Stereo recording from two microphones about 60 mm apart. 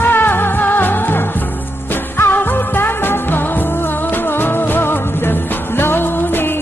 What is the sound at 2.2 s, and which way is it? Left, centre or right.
Music, left.